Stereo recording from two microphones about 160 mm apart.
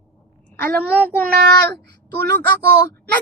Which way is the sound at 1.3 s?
90° right.